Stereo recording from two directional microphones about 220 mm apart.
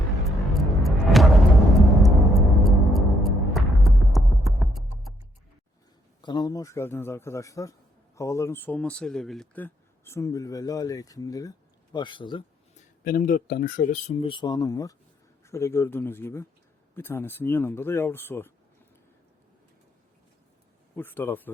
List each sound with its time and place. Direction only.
0.3 s music: centre (ahead or behind)
6.2 s a man's voice: 20° left (ahead or behind)
13.1 s speech: 40° left (ahead or behind); by 18.5 s 10° left (ahead or behind)
20.9 s speech: 10° left (ahead or behind)